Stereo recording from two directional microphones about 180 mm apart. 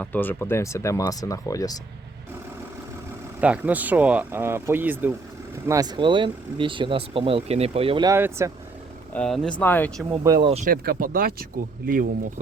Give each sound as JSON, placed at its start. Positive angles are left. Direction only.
{"t": 0.0, "sound": "speech", "side_deg": 10}
{"t": 3.4, "sound": "speech", "side_deg": -10}
{"t": 8.1, "sound": "speech", "side_deg": -15}
{"t": 9.1, "sound": "speech", "side_deg": 5}
{"t": 10.2, "sound": "speech", "side_deg": -20}
{"t": 10.5, "sound": "speech", "side_deg": -40}
{"t": 10.8, "sound": "speech", "side_deg": -55}